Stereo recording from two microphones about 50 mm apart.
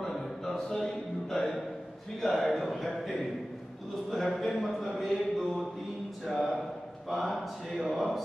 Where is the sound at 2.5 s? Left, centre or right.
Centre.